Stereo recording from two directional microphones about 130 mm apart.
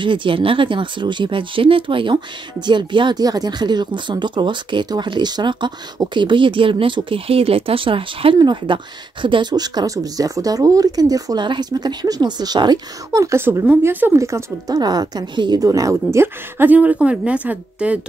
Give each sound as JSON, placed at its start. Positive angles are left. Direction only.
{"t": 0.0, "sound": "a woman's voice", "side_deg": -40}